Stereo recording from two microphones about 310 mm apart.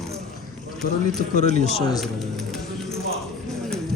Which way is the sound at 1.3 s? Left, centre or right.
Left.